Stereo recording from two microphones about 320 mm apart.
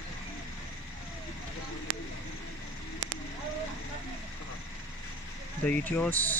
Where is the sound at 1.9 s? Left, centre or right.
Right.